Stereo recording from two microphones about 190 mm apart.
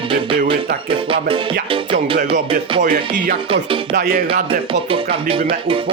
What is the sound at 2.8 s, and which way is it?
Music, 45° right (ahead or behind).